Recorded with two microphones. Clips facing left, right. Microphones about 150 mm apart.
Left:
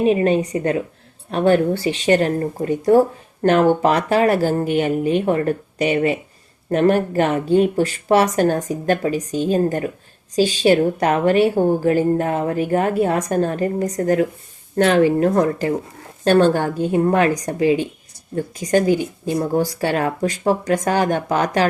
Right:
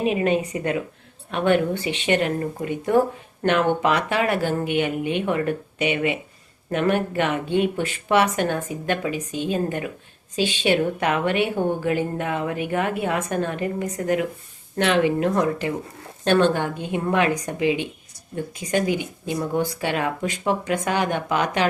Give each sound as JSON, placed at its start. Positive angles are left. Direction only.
{"t": 0.0, "sound": "a woman's voice", "side_deg": 35}